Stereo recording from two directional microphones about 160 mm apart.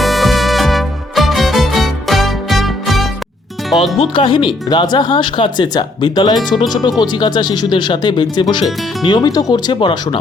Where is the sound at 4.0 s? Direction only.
30° left (ahead or behind).